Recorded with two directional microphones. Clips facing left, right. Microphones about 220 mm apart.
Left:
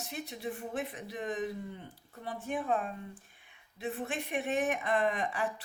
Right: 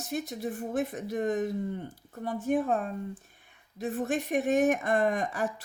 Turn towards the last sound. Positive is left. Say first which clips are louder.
# right 3 dB
turn(degrees=-45)  # may be behind; listen again after turning